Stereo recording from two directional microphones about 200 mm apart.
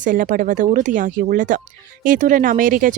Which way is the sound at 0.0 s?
40° right (ahead or behind).